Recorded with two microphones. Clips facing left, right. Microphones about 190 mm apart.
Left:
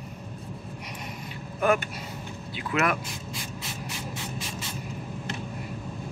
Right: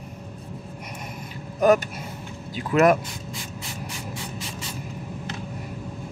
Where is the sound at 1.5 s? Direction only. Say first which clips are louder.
Right 6 dB; 40° right (ahead or behind).